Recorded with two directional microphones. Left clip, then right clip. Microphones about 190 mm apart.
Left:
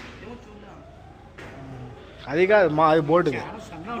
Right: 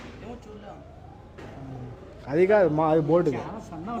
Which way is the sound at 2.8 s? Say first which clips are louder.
Left 3 dB; centre (ahead or behind).